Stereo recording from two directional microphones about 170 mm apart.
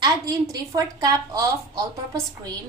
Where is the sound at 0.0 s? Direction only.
20° right (ahead or behind).